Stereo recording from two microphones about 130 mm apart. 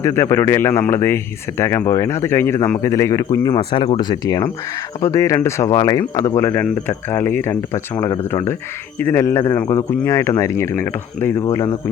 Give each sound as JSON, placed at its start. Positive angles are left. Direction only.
{"t": 0.0, "sound": "speech", "side_deg": 20}
{"t": 3.6, "sound": "speech", "side_deg": 40}